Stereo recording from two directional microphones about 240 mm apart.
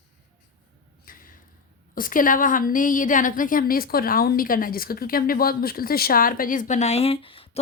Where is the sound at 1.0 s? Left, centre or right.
Left.